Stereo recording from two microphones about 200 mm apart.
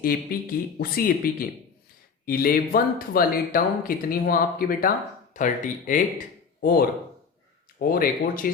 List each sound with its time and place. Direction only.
0.3 s speech: 45° left (ahead or behind)